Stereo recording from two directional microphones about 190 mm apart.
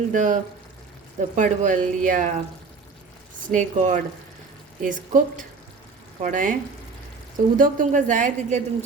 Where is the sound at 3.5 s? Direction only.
40° right (ahead or behind).